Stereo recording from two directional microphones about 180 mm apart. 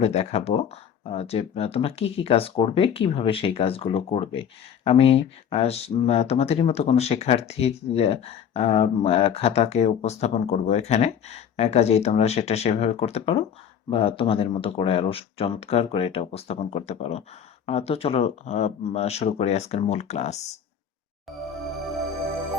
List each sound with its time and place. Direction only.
0.0 s speech: 35° left (ahead or behind)